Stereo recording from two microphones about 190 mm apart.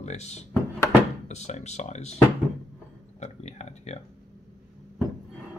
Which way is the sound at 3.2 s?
35° left (ahead or behind).